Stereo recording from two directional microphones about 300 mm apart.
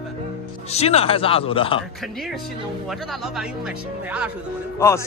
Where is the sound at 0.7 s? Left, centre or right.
Left.